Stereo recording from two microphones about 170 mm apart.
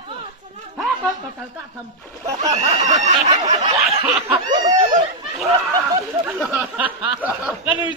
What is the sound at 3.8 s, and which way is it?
Speech, 10° right (ahead or behind).